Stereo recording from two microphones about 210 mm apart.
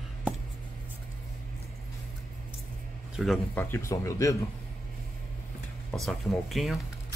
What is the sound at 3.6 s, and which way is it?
Speech, 15° left (ahead or behind).